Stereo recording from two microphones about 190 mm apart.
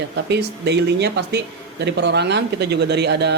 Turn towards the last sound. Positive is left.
turn(degrees=-60)  # may be behind; listen again after turning